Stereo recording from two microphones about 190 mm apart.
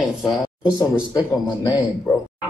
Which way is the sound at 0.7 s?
20° left (ahead or behind).